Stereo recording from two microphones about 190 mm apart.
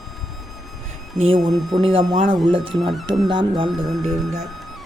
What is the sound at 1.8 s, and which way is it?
Speech, 25° right (ahead or behind).